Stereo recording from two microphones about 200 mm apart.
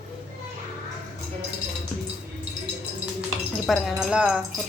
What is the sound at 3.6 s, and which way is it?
Speech, centre (ahead or behind).